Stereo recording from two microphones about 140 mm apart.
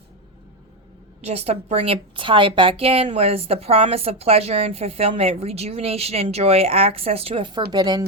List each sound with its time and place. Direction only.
1.2 s a woman's voice: 45° right (ahead or behind); by 8.0 s 30° right (ahead or behind)